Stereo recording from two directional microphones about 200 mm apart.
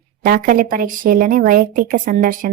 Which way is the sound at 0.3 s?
45° right (ahead or behind).